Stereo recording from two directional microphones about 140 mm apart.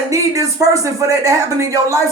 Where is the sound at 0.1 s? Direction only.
25° right (ahead or behind).